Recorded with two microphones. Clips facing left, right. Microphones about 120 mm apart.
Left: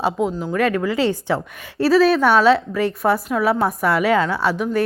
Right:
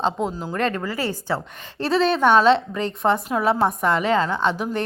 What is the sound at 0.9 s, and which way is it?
Speech, 20° left (ahead or behind).